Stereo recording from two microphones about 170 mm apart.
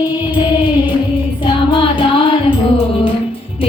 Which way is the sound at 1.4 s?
30° left (ahead or behind).